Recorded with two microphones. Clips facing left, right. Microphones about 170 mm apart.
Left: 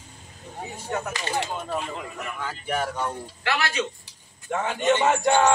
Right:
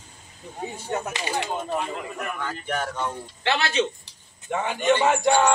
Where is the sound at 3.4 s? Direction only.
25° right (ahead or behind).